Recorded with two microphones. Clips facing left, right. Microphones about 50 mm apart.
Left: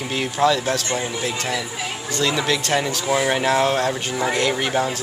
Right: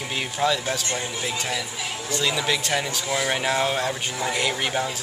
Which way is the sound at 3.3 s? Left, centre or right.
Centre.